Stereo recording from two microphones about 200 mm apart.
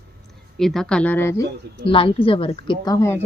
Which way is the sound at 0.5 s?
Centre (ahead or behind).